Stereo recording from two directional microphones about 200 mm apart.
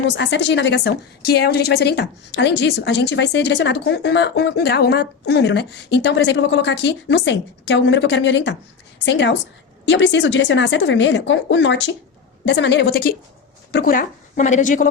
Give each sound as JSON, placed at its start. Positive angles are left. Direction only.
{"t": 0.1, "sound": "a woman's voice", "side_deg": 65}